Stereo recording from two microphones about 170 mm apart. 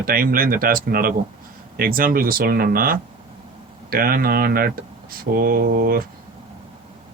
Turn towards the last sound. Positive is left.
turn(degrees=-60)  # may be behind; listen again after turning